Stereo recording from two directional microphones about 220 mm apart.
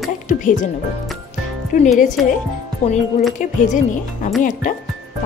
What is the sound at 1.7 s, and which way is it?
Speech, 35° left (ahead or behind).